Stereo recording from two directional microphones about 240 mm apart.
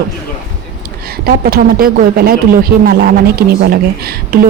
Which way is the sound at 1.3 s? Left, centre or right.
Right.